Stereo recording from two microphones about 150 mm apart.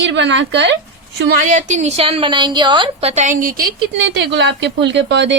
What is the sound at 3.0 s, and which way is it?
A woman's voice, 50° right (ahead or behind).